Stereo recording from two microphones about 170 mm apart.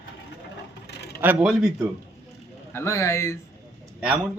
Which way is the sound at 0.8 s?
75° left (ahead or behind).